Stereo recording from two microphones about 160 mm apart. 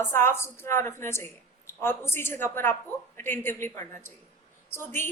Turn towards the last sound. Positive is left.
turn(degrees=15)  # may be behind; listen again after turning